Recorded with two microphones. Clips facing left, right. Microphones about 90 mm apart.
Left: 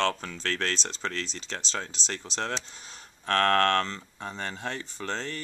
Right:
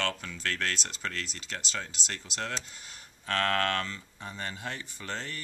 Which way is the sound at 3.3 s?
60° left (ahead or behind).